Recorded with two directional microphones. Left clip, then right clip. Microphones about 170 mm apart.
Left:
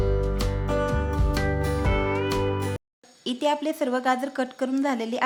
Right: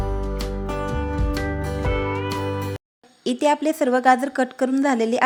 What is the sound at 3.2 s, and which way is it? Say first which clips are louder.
A woman's voice: right 5 dB; 25° right (ahead or behind).